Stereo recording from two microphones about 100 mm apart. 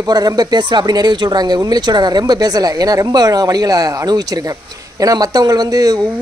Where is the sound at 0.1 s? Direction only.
40° right (ahead or behind).